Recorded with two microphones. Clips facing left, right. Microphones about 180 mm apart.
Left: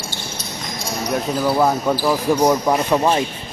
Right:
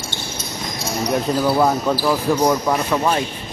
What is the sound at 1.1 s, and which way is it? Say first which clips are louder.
Speech: right 1 dB; 5° right (ahead or behind).